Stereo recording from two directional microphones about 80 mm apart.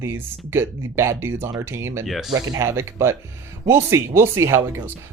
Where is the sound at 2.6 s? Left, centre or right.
Right.